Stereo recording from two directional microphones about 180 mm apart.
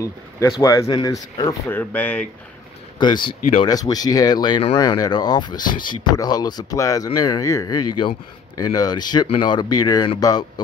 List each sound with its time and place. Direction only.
0.0 s speech: 15° left (ahead or behind)
3.0 s speech: 25° left (ahead or behind)